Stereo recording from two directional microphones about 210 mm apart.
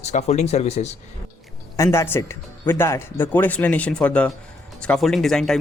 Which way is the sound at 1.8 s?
10° left (ahead or behind).